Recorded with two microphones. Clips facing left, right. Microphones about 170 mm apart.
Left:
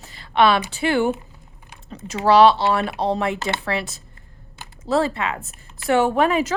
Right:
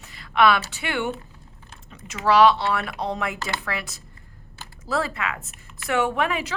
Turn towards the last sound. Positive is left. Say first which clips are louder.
# left 6 dB
turn(degrees=35)  # may be behind; listen again after turning